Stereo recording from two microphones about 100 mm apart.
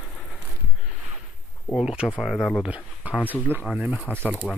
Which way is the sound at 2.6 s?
15° right (ahead or behind).